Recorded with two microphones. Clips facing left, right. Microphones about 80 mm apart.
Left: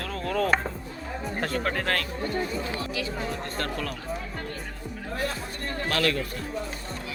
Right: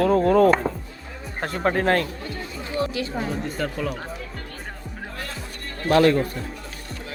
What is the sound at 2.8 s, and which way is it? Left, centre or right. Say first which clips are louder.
Speech: right 5 dB; right.